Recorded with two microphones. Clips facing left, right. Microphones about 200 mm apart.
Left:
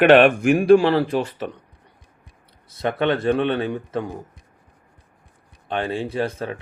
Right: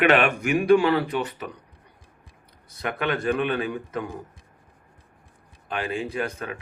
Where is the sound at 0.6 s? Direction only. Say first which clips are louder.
Left 3 dB; 30° left (ahead or behind).